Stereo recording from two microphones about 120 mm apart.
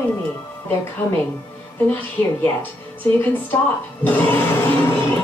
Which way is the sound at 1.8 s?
15° left (ahead or behind).